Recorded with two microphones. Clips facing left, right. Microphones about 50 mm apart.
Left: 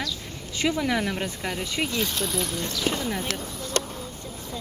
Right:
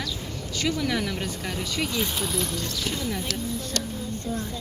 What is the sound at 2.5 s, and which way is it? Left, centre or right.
Speech, left.